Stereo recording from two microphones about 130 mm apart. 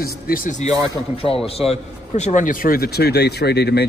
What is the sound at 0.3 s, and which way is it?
Speech, 80° left.